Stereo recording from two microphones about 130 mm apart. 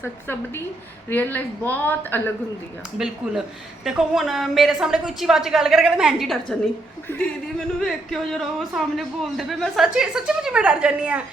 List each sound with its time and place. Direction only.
0.0 s a woman's voice: 15° left (ahead or behind)
3.0 s a man's voice: 5° right (ahead or behind)
7.1 s a woman's voice: 15° left (ahead or behind)
7.8 s a man's voice: centre (ahead or behind)